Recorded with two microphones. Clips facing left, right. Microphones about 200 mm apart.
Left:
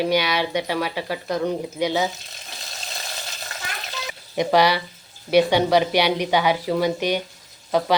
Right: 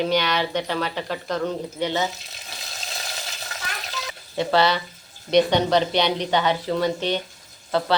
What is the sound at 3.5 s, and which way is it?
Stir, centre (ahead or behind).